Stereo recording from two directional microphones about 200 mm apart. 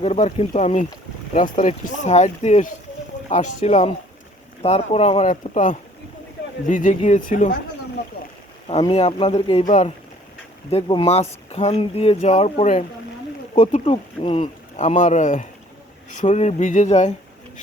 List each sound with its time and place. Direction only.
0.0 s speech: 35° left (ahead or behind)
8.6 s speech: 25° left (ahead or behind)
13.8 s speech: 25° left (ahead or behind)